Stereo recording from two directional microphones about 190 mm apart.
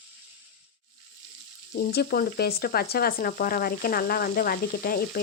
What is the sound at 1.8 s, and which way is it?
Speech, 55° left (ahead or behind).